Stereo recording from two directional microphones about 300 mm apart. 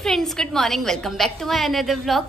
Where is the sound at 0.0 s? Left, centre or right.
Centre.